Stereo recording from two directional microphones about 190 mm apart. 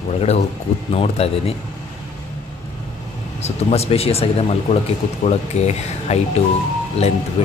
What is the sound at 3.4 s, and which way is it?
Speech, 35° left (ahead or behind).